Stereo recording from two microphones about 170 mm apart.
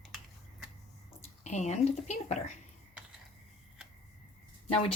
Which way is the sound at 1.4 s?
45° left (ahead or behind).